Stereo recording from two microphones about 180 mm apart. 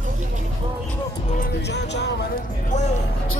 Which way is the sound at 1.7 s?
70° left (ahead or behind).